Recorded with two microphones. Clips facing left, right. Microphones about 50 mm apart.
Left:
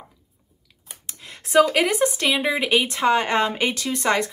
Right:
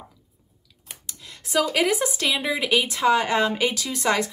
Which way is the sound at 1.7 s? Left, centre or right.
Centre.